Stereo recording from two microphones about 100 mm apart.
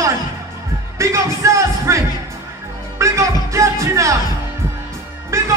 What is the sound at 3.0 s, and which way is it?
Speech, 30° right (ahead or behind).